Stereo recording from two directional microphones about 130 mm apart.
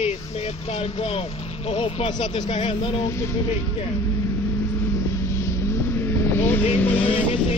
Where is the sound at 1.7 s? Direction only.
45° left (ahead or behind).